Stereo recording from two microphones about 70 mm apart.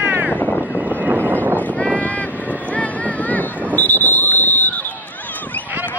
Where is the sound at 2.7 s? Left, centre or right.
Left.